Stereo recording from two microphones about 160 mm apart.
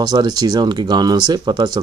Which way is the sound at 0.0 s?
25° right (ahead or behind).